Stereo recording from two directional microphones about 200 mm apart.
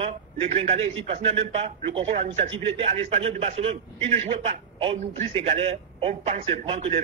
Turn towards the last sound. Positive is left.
turn(degrees=-30)  # may be behind; listen again after turning